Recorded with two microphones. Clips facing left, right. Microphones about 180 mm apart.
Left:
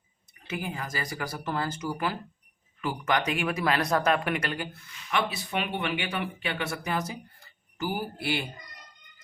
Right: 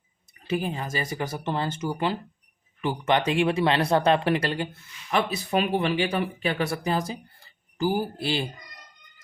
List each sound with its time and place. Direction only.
0.4 s speech: 30° right (ahead or behind)
5.1 s speech: 40° right (ahead or behind)